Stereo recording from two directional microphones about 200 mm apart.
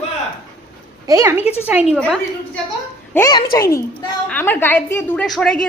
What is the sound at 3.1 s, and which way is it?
A child's voice, 20° left (ahead or behind).